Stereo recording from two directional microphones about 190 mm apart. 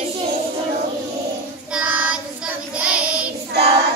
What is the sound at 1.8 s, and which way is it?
Child singing, 5° right (ahead or behind).